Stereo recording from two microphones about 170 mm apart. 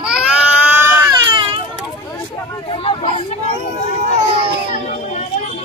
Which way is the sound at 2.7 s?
35° left (ahead or behind).